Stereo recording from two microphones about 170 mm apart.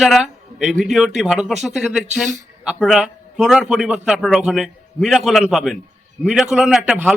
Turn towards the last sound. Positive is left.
turn(degrees=-5)  # may be behind; listen again after turning